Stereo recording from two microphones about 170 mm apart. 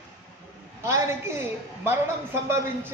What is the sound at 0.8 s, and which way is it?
A man's voice, 15° right (ahead or behind).